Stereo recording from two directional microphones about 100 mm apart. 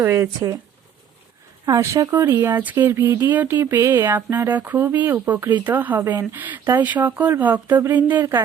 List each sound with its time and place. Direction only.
0.0 s speech: 30° right (ahead or behind)
1.6 s speech: 35° right (ahead or behind); by 8.2 s 15° right (ahead or behind)